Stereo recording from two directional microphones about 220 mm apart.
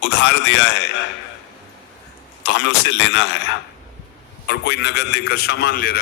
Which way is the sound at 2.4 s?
55° left (ahead or behind).